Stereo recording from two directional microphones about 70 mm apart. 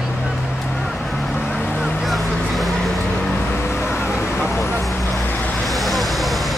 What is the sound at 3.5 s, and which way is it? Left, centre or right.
Vehicle, left.